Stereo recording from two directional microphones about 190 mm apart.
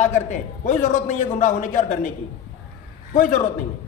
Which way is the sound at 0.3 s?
40° left (ahead or behind).